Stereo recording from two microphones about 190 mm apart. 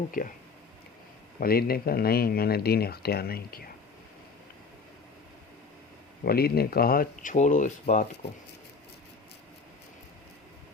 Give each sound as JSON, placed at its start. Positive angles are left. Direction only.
{"t": 1.4, "sound": "speech", "side_deg": 50}
{"t": 6.2, "sound": "speech", "side_deg": 55}